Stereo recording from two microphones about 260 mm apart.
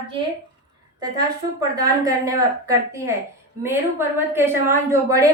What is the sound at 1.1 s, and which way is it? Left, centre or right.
A woman's voice, centre.